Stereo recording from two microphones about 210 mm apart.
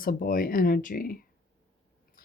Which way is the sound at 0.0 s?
45° left (ahead or behind).